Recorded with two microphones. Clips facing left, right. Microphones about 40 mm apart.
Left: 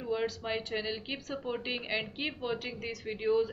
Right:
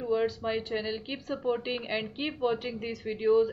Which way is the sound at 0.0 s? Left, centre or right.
Centre.